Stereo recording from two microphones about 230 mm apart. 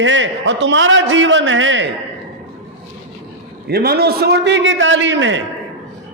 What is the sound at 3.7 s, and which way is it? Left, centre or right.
A man's voice, right.